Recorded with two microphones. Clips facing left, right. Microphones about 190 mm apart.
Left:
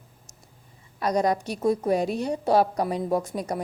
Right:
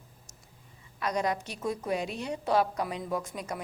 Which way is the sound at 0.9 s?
35° left (ahead or behind).